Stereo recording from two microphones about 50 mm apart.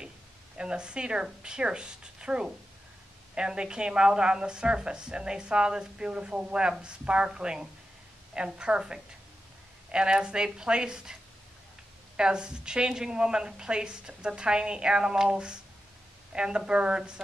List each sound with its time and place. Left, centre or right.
0.6 s a woman's voice: centre
12.2 s a woman's voice: centre